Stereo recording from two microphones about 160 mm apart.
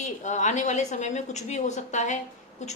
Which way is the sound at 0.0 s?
50° left (ahead or behind).